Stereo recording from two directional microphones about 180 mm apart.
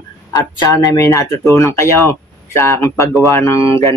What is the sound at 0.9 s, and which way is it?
Speech, 15° left (ahead or behind).